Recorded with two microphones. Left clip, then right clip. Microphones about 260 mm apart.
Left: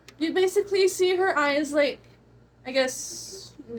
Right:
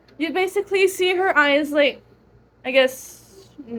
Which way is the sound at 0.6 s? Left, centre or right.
Right.